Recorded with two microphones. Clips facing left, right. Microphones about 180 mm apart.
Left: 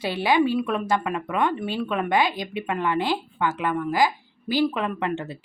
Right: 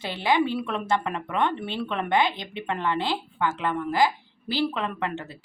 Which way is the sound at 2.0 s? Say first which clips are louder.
Even; 25° right (ahead or behind).